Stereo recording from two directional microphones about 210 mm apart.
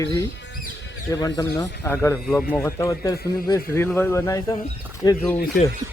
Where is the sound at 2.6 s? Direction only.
15° left (ahead or behind).